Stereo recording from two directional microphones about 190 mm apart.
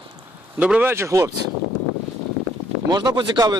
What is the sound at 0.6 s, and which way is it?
Speech, 5° right (ahead or behind).